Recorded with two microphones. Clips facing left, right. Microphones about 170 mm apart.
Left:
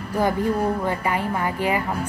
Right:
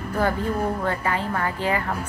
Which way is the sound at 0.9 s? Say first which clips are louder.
Left 1 dB; 15° left (ahead or behind).